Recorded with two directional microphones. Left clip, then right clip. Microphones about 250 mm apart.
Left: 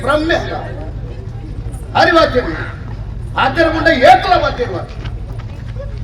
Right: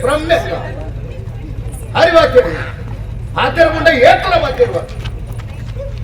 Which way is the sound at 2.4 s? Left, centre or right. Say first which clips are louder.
Right 2 dB; right.